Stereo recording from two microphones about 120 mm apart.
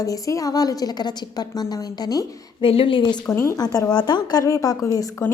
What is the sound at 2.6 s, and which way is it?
Speech, 50° left (ahead or behind).